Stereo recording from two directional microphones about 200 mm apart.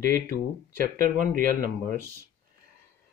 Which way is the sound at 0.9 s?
45° right (ahead or behind).